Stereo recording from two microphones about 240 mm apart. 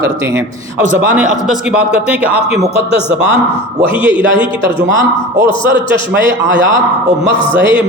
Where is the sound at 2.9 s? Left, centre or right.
Left.